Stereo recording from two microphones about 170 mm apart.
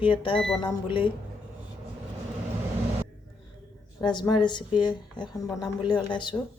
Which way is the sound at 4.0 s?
25° left (ahead or behind).